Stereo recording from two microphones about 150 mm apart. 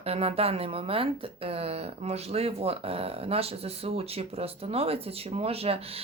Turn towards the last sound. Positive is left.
turn(degrees=-40)  # may be behind; listen again after turning